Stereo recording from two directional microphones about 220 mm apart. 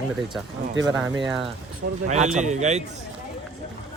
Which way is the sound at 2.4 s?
30° right (ahead or behind).